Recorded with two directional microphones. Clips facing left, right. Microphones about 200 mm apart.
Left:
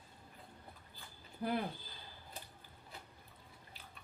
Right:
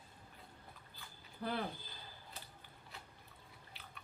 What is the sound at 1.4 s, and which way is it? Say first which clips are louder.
Speech: left 4 dB; 15° left (ahead or behind).